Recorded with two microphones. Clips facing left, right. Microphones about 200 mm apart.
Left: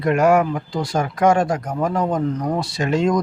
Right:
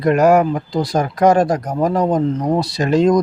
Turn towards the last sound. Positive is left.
turn(degrees=-35)  # may be behind; listen again after turning